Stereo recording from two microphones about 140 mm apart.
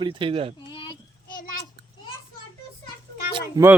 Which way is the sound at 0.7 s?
35° left (ahead or behind).